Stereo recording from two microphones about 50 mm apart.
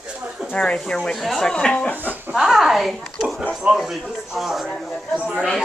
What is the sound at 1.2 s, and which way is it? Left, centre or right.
Speech, centre.